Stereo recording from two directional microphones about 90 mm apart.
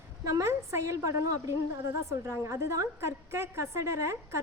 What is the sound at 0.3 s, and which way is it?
A woman's voice, 35° right (ahead or behind).